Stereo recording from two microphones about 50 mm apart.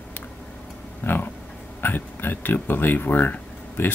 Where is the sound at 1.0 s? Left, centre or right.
Left.